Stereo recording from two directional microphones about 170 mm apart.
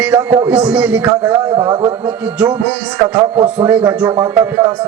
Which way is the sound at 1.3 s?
25° right (ahead or behind).